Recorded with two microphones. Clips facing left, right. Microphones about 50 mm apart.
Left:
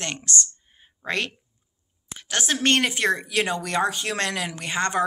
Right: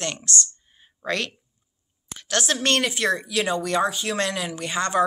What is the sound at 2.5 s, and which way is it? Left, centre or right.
Speech, left.